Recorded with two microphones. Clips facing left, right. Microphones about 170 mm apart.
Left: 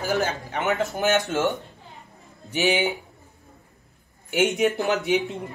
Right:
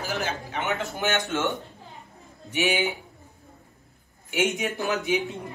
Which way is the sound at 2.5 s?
35° left (ahead or behind).